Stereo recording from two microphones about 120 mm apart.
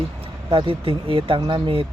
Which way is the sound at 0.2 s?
45° right (ahead or behind).